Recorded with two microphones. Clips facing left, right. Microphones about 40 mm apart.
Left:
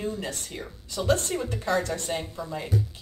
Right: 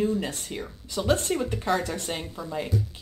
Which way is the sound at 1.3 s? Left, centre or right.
Centre.